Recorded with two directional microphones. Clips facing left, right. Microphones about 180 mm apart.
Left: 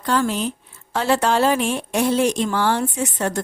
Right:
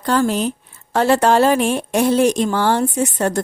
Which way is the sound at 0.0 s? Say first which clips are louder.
Right 4 dB; 40° right (ahead or behind).